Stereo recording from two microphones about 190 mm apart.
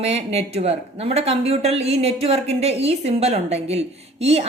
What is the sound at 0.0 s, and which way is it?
Speech, 35° right (ahead or behind).